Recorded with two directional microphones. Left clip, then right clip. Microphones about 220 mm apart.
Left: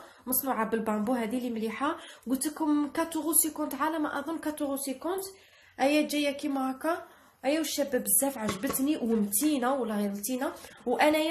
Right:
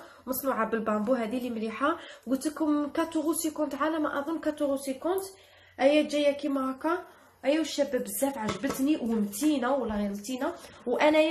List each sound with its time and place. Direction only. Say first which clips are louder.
0.5 s speech: right 1 dB; 40° left (ahead or behind)